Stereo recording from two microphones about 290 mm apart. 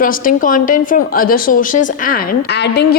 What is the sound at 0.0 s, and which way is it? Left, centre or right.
A woman's voice, left.